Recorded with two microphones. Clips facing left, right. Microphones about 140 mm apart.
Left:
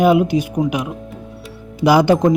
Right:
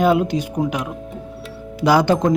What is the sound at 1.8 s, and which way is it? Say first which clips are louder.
Speech: left 3 dB; 10° left (ahead or behind).